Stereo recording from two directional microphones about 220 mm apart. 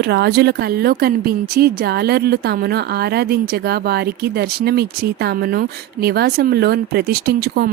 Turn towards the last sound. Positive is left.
turn(degrees=-45)  # may be behind; listen again after turning